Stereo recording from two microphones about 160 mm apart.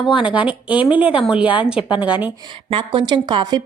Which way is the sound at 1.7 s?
30° left (ahead or behind).